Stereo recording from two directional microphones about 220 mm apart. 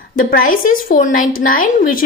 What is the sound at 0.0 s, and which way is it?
A woman's voice, 40° left (ahead or behind).